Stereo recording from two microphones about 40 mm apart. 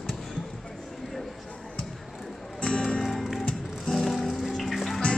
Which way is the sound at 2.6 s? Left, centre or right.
Centre.